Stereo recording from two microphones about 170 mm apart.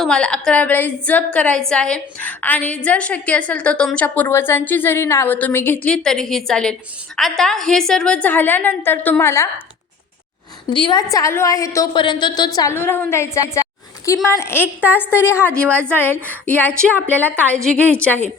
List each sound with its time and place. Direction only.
0.0 s a woman's voice: 5° left (ahead or behind)
10.7 s a woman's voice: 30° left (ahead or behind)
12.5 s a woman's voice: 15° left (ahead or behind)